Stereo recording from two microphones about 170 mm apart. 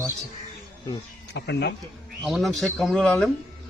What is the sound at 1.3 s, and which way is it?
Speech, 90° left.